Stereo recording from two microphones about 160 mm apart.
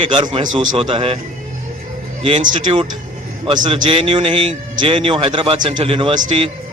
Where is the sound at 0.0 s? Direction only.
30° right (ahead or behind).